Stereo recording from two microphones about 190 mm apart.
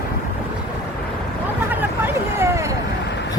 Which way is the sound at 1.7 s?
10° right (ahead or behind).